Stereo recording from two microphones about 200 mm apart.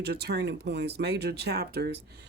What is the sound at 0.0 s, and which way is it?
Speech, 55° right (ahead or behind).